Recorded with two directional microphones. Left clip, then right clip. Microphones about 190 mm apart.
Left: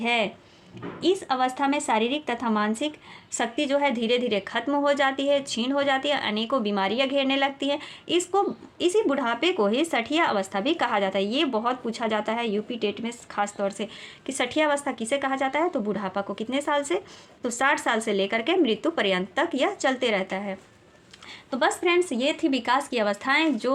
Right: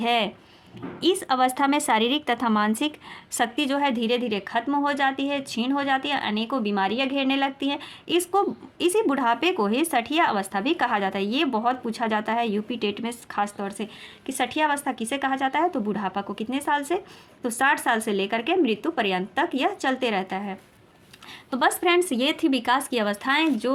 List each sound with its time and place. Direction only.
0.0 s a woman's voice: 25° right (ahead or behind); by 20.6 s 5° right (ahead or behind)
21.5 s a woman's voice: 15° right (ahead or behind)